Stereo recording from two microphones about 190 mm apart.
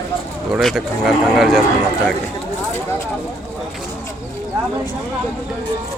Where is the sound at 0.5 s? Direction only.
Centre (ahead or behind).